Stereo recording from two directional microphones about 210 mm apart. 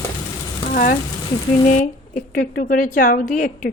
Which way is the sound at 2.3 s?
45° left (ahead or behind).